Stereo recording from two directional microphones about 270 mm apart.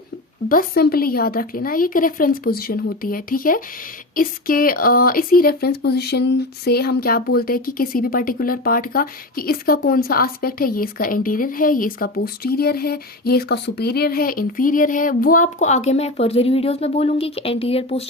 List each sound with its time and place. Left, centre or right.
0.4 s speech: left